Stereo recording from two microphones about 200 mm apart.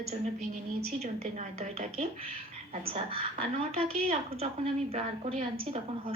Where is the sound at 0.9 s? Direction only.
35° right (ahead or behind).